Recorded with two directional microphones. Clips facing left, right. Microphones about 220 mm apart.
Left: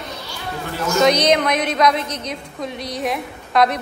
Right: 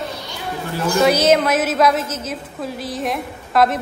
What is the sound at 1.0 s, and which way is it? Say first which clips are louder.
A woman's voice: right 1 dB; 5° right (ahead or behind).